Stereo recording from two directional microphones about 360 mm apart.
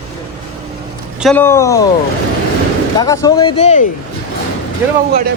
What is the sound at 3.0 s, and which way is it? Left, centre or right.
Speech, centre.